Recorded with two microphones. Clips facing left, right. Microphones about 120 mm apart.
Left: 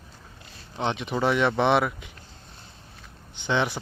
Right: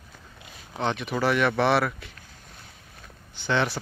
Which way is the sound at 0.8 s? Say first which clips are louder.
Even; 20° left (ahead or behind).